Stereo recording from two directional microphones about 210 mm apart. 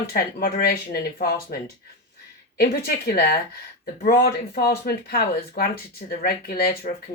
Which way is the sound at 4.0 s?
45° left (ahead or behind).